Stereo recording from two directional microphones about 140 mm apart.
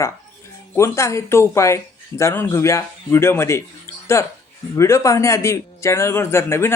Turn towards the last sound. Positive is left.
turn(degrees=20)  # may be behind; listen again after turning